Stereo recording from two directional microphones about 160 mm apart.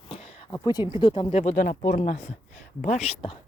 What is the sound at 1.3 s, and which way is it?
Speech, 45° left (ahead or behind).